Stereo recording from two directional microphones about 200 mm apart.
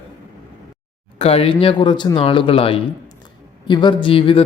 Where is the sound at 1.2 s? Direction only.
30° left (ahead or behind).